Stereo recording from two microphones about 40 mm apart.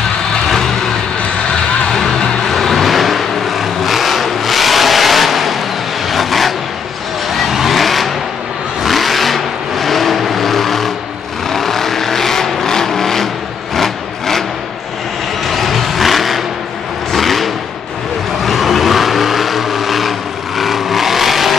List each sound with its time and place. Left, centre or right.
0.5 s vehicle: centre
1.9 s vehicle: centre
13.7 s a sound: centre
15.4 s vehicle: centre